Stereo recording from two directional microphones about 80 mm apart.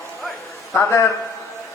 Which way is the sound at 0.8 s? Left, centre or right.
Left.